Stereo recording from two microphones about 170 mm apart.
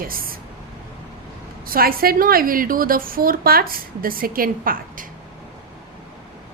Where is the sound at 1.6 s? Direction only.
60° right (ahead or behind).